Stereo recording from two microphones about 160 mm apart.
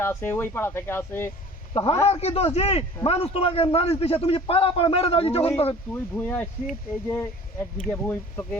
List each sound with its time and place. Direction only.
0.0 s speech: 15° left (ahead or behind)
1.7 s a man's voice: 30° left (ahead or behind)
5.9 s speech: 10° left (ahead or behind)